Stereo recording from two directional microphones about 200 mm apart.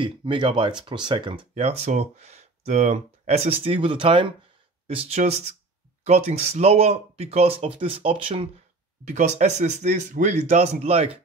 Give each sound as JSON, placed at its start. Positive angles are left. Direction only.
{"t": 0.0, "sound": "speech", "side_deg": -25}